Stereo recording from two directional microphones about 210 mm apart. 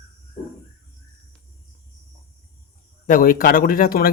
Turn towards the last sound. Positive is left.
turn(degrees=45)  # may be behind; listen again after turning